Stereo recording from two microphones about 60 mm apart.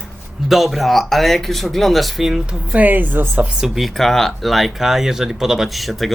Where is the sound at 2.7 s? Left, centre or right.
Right.